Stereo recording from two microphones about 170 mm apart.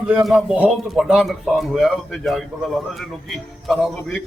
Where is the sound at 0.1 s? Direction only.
Centre (ahead or behind).